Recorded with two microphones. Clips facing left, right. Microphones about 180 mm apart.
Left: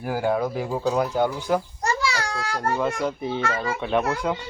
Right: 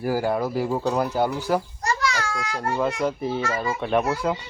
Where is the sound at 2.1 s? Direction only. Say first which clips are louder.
Even; 35° left (ahead or behind).